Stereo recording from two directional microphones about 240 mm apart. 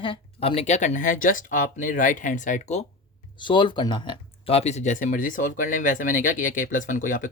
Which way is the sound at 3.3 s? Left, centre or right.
Centre.